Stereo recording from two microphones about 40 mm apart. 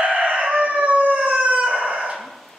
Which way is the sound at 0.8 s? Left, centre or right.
Right.